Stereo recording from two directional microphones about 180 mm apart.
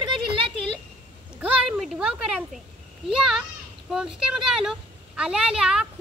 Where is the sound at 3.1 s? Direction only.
Centre (ahead or behind).